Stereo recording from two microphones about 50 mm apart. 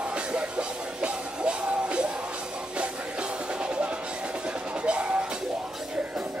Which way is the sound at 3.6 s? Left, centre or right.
Centre.